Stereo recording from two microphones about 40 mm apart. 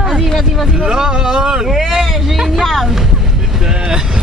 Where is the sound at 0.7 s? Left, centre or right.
Centre.